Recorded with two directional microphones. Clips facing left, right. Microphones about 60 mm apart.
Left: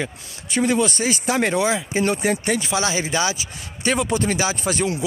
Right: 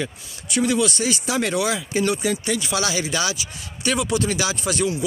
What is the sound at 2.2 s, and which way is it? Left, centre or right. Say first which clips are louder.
Speech: left 2 dB; left.